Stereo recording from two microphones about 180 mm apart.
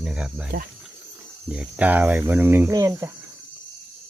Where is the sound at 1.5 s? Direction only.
5° right (ahead or behind).